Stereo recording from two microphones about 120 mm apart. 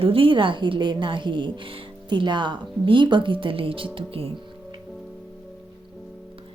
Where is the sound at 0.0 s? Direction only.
50° right (ahead or behind).